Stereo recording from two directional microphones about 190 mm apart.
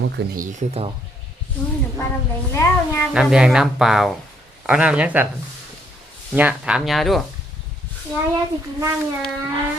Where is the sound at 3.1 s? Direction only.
5° right (ahead or behind).